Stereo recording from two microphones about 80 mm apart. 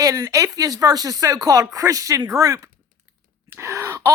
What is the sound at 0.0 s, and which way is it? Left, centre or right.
Speech, right.